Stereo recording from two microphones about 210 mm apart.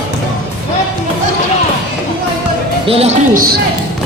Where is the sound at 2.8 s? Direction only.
30° right (ahead or behind).